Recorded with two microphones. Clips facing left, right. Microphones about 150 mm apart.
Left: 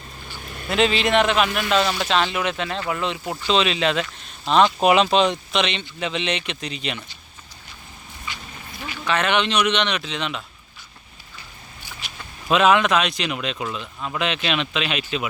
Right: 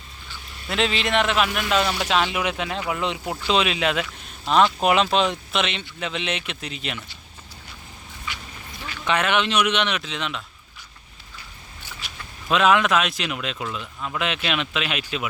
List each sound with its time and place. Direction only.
0.4 s vehicle: 55° left (ahead or behind)
0.7 s speech: centre (ahead or behind)
9.2 s speech: 5° right (ahead or behind)
12.5 s speech: centre (ahead or behind)